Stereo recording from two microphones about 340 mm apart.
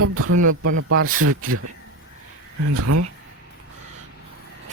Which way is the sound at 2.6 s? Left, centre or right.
Right.